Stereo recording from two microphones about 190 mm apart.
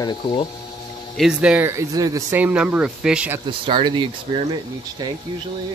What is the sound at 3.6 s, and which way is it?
Speech, 25° right (ahead or behind).